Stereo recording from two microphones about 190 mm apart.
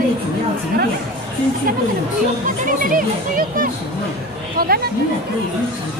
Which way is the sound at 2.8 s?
45° right (ahead or behind).